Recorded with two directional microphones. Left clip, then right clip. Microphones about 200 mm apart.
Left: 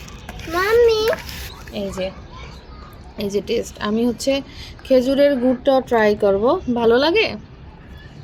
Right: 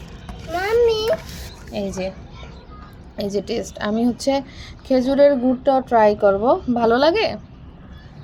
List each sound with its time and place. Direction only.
0.5 s a sound: 45° left (ahead or behind)
1.7 s a woman's voice: 5° right (ahead or behind)
3.2 s a woman's voice: centre (ahead or behind)